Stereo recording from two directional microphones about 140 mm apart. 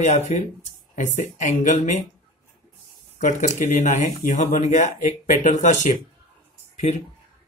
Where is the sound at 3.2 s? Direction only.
60° left (ahead or behind).